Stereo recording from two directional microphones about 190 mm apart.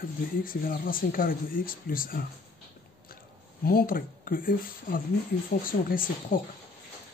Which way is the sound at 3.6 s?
50° left (ahead or behind).